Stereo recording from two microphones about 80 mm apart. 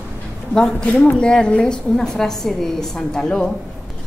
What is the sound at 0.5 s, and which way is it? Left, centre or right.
A woman's voice, centre.